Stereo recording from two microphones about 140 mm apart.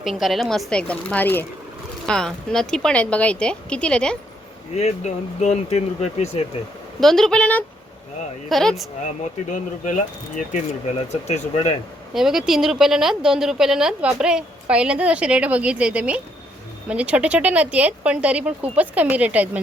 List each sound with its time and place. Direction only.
0.0 s speech: centre (ahead or behind)
4.7 s speech: 50° left (ahead or behind)
7.0 s speech: centre (ahead or behind)
9.5 s speech: 65° left (ahead or behind)
10.9 s speech: 50° left (ahead or behind)
12.1 s speech: 5° right (ahead or behind)